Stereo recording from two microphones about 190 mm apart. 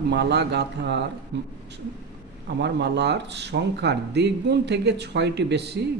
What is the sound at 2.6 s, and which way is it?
Speech, 65° right (ahead or behind).